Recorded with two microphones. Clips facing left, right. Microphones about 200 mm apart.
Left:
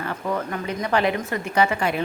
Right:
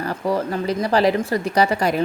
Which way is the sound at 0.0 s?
35° right (ahead or behind).